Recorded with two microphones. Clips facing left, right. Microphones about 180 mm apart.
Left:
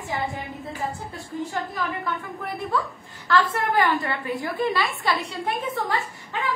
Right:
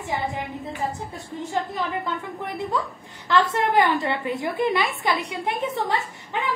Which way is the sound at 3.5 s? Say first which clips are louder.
Right 2 dB; 20° right (ahead or behind).